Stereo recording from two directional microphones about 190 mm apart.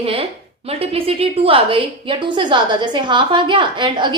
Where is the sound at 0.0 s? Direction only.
30° right (ahead or behind).